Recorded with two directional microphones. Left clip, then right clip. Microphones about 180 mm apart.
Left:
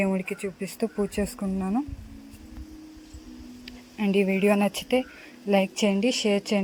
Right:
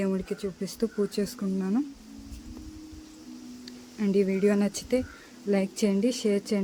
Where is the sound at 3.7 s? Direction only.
10° left (ahead or behind).